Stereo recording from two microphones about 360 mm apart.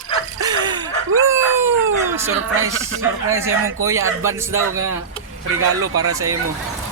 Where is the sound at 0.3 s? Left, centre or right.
Centre.